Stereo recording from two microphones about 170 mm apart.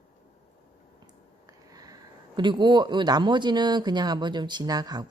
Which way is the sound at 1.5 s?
20° right (ahead or behind).